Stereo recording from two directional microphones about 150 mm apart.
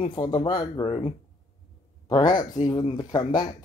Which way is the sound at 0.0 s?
35° left (ahead or behind).